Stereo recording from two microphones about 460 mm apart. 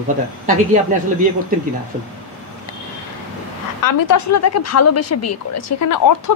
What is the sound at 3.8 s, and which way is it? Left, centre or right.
Speech, left.